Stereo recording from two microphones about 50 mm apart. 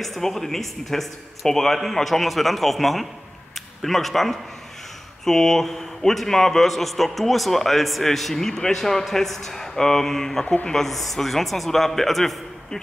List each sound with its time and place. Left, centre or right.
0.0 s a man's voice: centre
10.4 s a woman's voice: left
10.7 s speech: centre